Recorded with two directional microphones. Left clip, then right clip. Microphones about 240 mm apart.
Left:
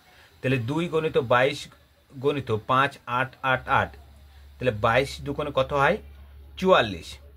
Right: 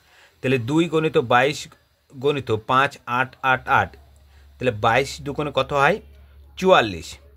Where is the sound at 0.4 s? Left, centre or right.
Right.